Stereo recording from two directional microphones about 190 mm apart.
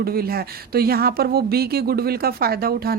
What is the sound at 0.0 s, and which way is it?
A woman's voice, 55° right (ahead or behind).